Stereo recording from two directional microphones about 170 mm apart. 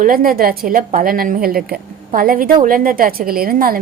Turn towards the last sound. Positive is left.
turn(degrees=-60)  # may be behind; listen again after turning